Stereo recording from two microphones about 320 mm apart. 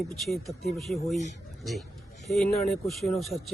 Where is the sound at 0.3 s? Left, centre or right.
Centre.